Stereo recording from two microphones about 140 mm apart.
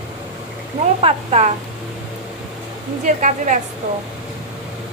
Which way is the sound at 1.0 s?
55° right (ahead or behind).